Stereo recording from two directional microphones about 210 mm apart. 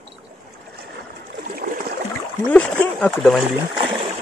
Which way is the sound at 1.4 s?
45° right (ahead or behind).